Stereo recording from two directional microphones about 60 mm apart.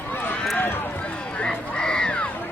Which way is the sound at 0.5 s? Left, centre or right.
Left.